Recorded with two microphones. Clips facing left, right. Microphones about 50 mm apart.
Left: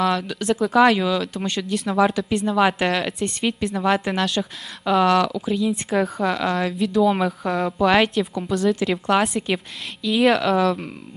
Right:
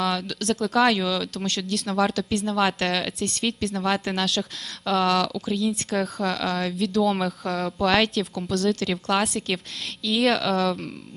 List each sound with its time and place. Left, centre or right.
0.0 s speech: centre